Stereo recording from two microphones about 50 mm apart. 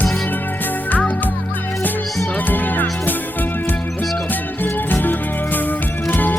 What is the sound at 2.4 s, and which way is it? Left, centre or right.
Music, left.